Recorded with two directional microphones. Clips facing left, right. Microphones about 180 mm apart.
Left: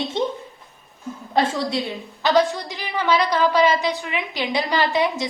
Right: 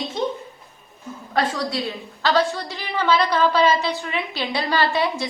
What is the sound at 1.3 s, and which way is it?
A woman's voice, 25° left (ahead or behind).